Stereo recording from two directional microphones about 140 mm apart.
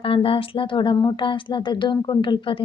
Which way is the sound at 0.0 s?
40° left (ahead or behind).